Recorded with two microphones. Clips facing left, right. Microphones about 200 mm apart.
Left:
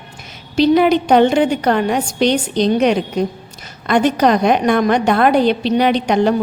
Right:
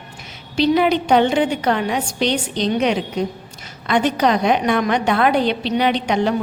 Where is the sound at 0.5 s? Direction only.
45° left (ahead or behind).